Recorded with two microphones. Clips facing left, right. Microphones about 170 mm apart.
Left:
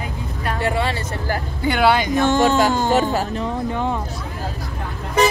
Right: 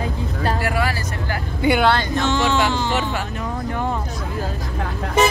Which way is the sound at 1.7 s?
10° left (ahead or behind).